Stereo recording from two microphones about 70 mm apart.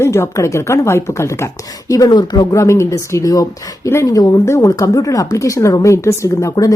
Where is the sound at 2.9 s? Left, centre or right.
Left.